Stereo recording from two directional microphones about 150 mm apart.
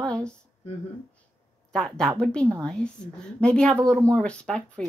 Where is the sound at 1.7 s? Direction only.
5° left (ahead or behind).